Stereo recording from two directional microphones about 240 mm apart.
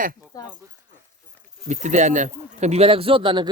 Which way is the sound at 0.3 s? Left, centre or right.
Centre.